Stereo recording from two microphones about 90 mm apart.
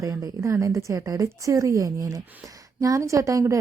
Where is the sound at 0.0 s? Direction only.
35° right (ahead or behind).